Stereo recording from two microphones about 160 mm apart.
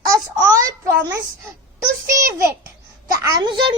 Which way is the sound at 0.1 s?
20° right (ahead or behind).